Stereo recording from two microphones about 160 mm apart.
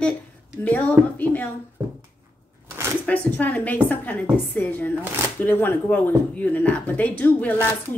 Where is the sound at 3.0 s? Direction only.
10° left (ahead or behind).